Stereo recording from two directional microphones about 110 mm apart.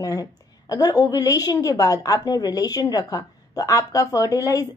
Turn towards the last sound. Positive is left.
turn(degrees=30)  # may be behind; listen again after turning